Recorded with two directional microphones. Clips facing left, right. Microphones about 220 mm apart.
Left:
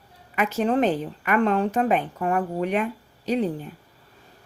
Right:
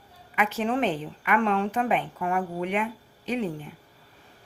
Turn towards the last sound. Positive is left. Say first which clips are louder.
# left 4 dB
turn(degrees=40)  # may be behind; listen again after turning